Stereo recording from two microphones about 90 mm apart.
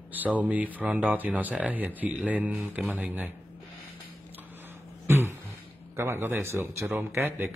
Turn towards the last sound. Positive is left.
turn(degrees=-25)  # may be behind; listen again after turning